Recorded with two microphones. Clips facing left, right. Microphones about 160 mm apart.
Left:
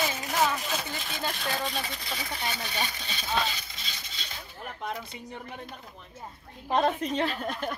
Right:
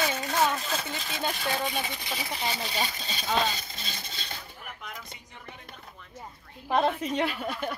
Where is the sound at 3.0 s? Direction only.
45° right (ahead or behind).